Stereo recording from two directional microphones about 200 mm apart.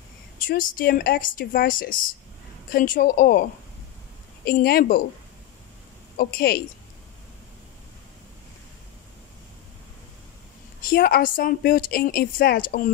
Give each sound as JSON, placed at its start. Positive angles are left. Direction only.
{"t": 0.4, "sound": "speech", "side_deg": 45}
{"t": 4.5, "sound": "speech", "side_deg": 50}
{"t": 6.1, "sound": "speech", "side_deg": 50}
{"t": 10.9, "sound": "speech", "side_deg": 50}